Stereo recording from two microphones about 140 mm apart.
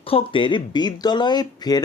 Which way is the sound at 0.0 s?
40° left (ahead or behind).